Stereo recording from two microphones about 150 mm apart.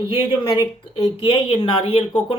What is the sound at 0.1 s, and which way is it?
Speech, 35° left (ahead or behind).